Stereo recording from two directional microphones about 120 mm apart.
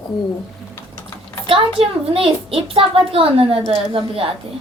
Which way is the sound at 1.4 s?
50° right (ahead or behind).